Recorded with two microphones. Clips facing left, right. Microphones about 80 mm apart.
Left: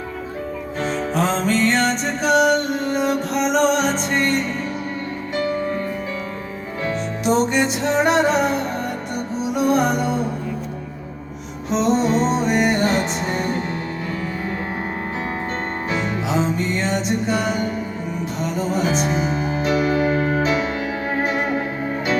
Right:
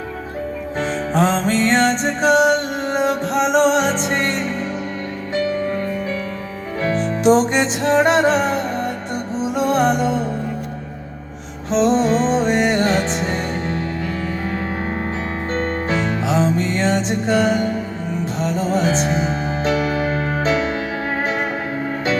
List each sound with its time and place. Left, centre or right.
0.8 s music: right
3.8 s music: left
5.3 s music: left
6.8 s music: right
9.7 s music: right
11.7 s music: right
16.4 s music: right